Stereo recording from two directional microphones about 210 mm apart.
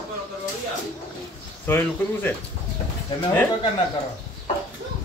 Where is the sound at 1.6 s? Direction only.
10° left (ahead or behind).